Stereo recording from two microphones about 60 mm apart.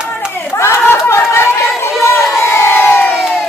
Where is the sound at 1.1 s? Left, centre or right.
Left.